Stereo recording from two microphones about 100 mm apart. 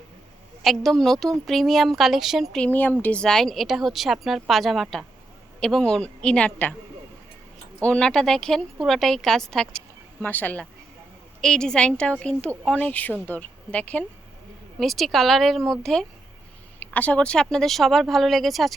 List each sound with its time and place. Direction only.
0.6 s speech: centre (ahead or behind)
2.6 s a woman's voice: 15° left (ahead or behind)
7.8 s speech: 10° left (ahead or behind)
10.2 s a woman's voice: 20° left (ahead or behind)
14.8 s speech: 5° left (ahead or behind)